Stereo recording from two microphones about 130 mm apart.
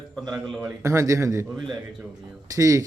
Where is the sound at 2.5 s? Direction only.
25° right (ahead or behind).